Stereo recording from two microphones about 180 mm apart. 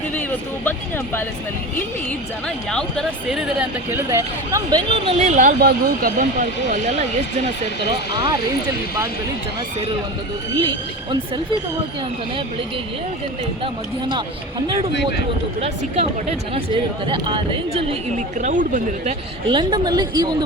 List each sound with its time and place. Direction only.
0.1 s speech: 10° left (ahead or behind)
2.6 s speech: centre (ahead or behind)
3.9 s speech: 15° right (ahead or behind)
5.2 s speech: 45° right (ahead or behind)
5.5 s speech: 55° right (ahead or behind)
8.1 s speech: 25° right (ahead or behind)
14.0 s speech: 25° right (ahead or behind)
16.6 s speech: 25° right (ahead or behind)
18.3 s speech: 45° right (ahead or behind)
19.5 s speech: 25° right (ahead or behind)